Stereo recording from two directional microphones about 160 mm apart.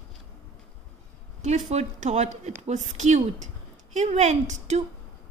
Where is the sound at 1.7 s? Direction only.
45° right (ahead or behind).